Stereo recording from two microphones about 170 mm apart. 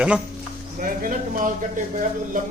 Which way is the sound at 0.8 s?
50° right (ahead or behind).